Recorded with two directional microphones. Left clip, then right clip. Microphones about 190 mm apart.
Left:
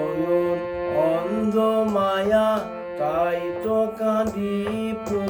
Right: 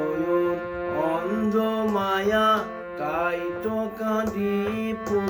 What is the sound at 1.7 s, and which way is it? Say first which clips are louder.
Music: left 3 dB; 15° left (ahead or behind).